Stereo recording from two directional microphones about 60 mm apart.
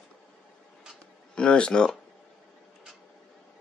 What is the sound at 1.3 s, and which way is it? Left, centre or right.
Speech, centre.